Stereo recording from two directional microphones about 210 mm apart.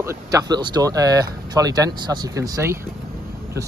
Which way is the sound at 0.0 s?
15° right (ahead or behind).